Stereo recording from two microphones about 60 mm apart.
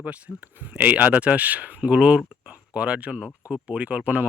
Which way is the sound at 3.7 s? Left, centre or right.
Centre.